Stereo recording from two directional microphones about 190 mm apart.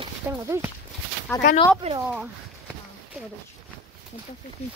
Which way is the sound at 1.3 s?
15° left (ahead or behind).